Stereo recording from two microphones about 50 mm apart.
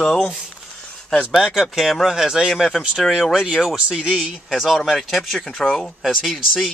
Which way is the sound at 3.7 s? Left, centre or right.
Centre.